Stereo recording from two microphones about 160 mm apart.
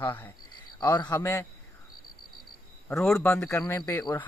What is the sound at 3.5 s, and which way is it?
Speech, 20° left (ahead or behind).